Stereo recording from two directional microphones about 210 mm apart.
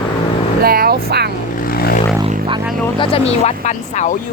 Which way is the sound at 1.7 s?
45° left (ahead or behind).